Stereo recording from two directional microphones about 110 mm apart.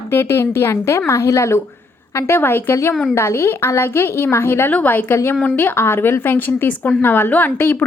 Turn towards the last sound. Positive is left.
turn(degrees=20)  # may be behind; listen again after turning